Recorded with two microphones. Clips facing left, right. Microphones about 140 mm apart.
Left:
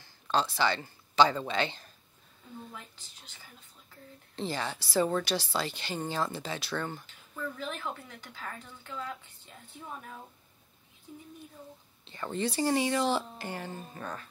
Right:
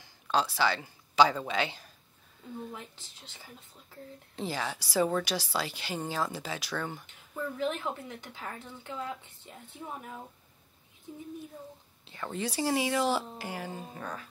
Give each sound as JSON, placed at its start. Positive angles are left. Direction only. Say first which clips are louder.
{"t": 0.0, "sound": "speech", "louder": "even", "side_deg": -10}
{"t": 2.7, "sound": "speech", "louder": "right 4 dB", "side_deg": -25}
{"t": 4.4, "sound": "a woman's voice", "louder": "even", "side_deg": -10}
{"t": 7.1, "sound": "speech", "louder": "right 2 dB", "side_deg": -20}
{"t": 12.0, "sound": "a woman's voice", "louder": "left 2 dB", "side_deg": -5}